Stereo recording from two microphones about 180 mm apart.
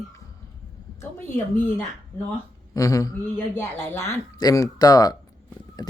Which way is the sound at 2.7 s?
20° left (ahead or behind).